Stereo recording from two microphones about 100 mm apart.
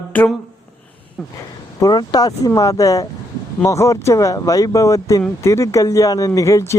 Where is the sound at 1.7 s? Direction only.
40° left (ahead or behind).